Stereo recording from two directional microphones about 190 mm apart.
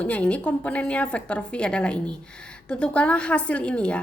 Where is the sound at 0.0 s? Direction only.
5° left (ahead or behind).